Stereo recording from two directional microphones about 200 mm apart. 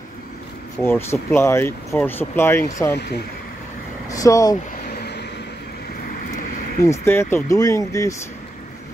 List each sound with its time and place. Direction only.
0.7 s speech: 10° left (ahead or behind)
4.1 s speech: 15° left (ahead or behind)
4.9 s vehicle: 55° left (ahead or behind)
6.8 s speech: 15° left (ahead or behind)